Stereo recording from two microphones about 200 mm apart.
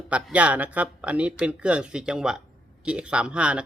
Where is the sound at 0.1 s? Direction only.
5° right (ahead or behind).